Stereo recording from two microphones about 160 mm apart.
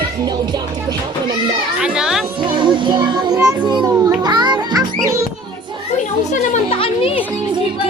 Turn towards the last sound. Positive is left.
turn(degrees=35)  # may be behind; listen again after turning